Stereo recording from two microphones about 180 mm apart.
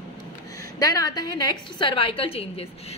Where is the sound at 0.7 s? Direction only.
20° left (ahead or behind).